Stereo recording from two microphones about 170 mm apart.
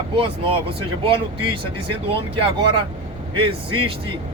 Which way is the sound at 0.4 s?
30° right (ahead or behind).